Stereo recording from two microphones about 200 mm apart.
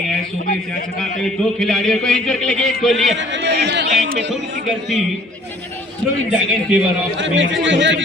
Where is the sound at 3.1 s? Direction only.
65° right (ahead or behind).